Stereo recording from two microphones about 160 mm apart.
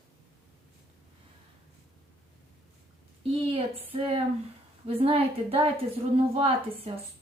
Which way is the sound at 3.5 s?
35° right (ahead or behind).